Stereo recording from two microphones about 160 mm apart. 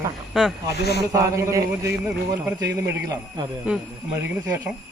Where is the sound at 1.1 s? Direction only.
20° right (ahead or behind).